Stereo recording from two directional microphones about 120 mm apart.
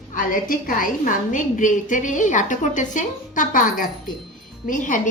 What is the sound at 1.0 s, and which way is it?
A woman's voice, 90° left.